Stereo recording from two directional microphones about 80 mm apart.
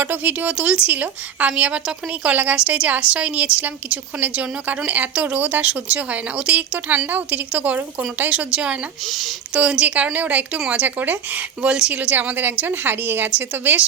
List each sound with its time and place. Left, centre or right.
0.0 s a woman's voice: right
9.0 s speech: centre
9.6 s a woman's voice: centre